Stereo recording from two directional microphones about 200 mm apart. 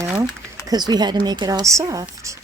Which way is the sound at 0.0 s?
10° right (ahead or behind).